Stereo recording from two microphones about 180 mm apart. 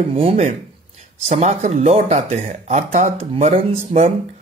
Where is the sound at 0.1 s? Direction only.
35° right (ahead or behind).